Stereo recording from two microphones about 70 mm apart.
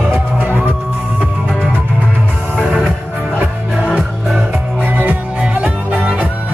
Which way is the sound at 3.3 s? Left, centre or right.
Centre.